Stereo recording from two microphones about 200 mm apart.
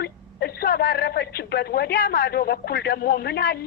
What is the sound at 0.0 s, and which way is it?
A woman's voice, 50° left (ahead or behind).